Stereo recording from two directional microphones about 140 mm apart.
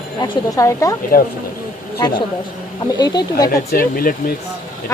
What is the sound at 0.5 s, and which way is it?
Speech, 25° left (ahead or behind).